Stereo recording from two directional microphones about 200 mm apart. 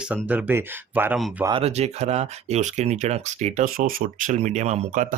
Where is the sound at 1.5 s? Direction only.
30° right (ahead or behind).